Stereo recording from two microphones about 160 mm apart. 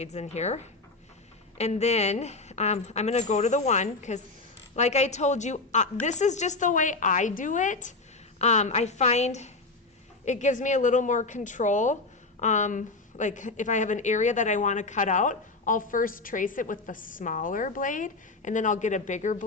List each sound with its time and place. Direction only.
0.0 s a woman's voice: 45° left (ahead or behind)